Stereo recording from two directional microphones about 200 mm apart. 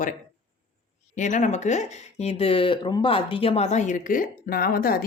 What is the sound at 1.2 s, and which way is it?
Speech, 40° left (ahead or behind).